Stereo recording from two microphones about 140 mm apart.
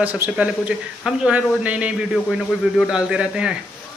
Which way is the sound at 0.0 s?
10° right (ahead or behind).